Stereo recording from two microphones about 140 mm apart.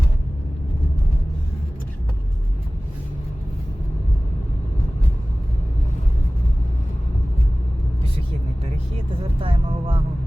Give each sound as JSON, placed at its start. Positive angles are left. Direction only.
{"t": 9.4, "sound": "music", "side_deg": -40}